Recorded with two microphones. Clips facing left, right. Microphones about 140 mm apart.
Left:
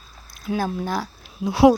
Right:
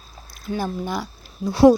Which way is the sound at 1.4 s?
10° left (ahead or behind).